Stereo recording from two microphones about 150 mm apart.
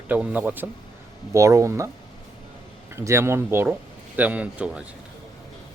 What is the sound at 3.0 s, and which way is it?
Speech, 20° right (ahead or behind).